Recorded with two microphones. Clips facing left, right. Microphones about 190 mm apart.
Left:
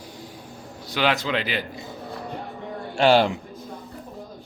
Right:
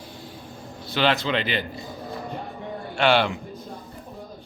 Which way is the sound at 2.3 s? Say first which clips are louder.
Even; centre (ahead or behind).